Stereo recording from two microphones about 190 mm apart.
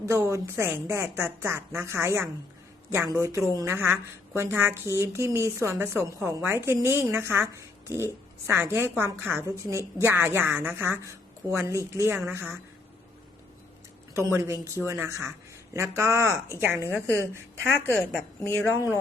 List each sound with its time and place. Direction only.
0.0 s a woman's voice: 15° right (ahead or behind)
14.1 s a woman's voice: 15° right (ahead or behind)
17.6 s a woman's voice: 10° left (ahead or behind)
18.4 s speech: 15° left (ahead or behind)